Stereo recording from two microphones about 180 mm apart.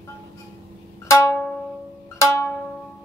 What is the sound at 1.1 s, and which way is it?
Music, 15° left (ahead or behind).